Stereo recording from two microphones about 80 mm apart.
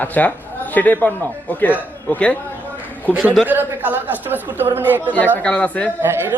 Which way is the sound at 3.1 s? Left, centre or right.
Centre.